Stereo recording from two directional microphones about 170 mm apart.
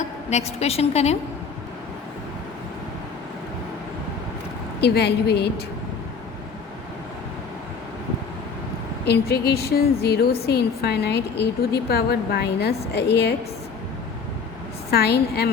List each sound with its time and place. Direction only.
0.0 s a woman's voice: 40° left (ahead or behind)
4.8 s a woman's voice: 75° left (ahead or behind)
9.0 s a woman's voice: 75° left (ahead or behind)
14.8 s a woman's voice: 70° left (ahead or behind)